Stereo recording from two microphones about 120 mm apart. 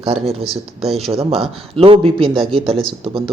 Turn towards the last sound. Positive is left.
turn(degrees=-50)  # may be behind; listen again after turning